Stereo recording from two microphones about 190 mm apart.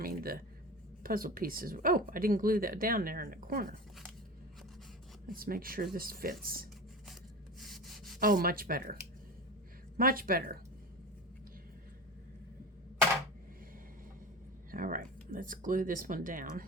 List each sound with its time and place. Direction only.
0.0 s speech: 50° right (ahead or behind)
5.2 s speech: 50° right (ahead or behind)
7.6 s rub: centre (ahead or behind)
8.2 s speech: 50° right (ahead or behind)
10.0 s speech: 50° right (ahead or behind)
14.7 s speech: 45° right (ahead or behind)